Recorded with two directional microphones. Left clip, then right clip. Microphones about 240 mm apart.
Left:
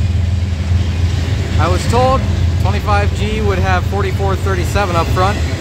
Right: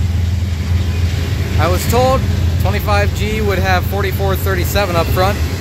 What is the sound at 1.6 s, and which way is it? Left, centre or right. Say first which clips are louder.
Speech: even; centre.